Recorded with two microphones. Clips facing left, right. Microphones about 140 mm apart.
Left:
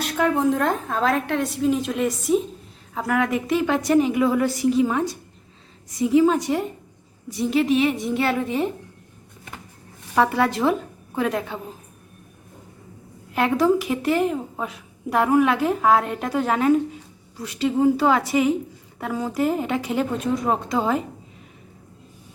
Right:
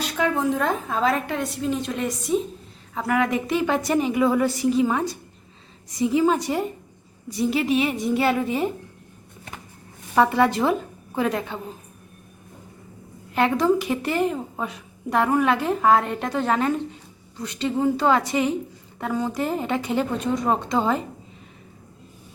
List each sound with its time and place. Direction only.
0.0 s a woman's voice: centre (ahead or behind)
10.2 s a woman's voice: centre (ahead or behind)
13.3 s a woman's voice: 5° left (ahead or behind)